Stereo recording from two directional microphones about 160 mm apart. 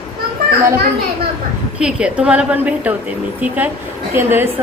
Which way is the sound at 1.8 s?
5° right (ahead or behind).